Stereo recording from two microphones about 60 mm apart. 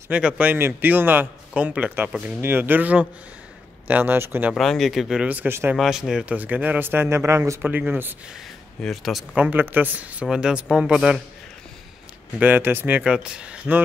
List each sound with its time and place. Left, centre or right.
0.1 s speech: right
0.6 s speech: right
2.4 s speech: right
4.6 s speech: centre
5.2 s speech: right
5.8 s speech: centre
6.2 s speech: right
7.1 s speech: right
7.6 s speech: right
8.8 s speech: centre
9.3 s speech: right
10.2 s speech: centre
12.4 s speech: right
13.1 s speech: centre